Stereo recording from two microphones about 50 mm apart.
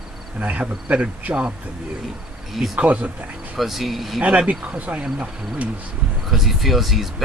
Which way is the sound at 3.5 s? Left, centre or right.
Centre.